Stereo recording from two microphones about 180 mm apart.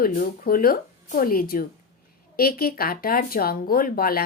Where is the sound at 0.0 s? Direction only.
55° left (ahead or behind).